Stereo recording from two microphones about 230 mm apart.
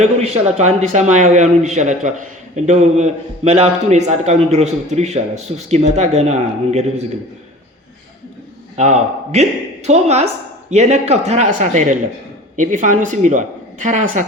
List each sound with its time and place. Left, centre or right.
0.0 s a man's voice: right
8.7 s a man's voice: right